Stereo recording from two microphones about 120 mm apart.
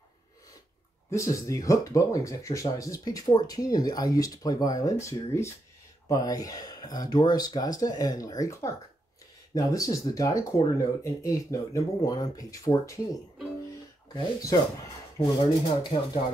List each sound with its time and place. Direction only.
1.1 s speech: 25° left (ahead or behind)
14.1 s speech: 30° left (ahead or behind)
15.6 s speech: 40° left (ahead or behind)